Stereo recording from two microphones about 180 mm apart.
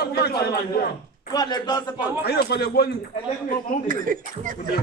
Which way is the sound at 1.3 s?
20° left (ahead or behind).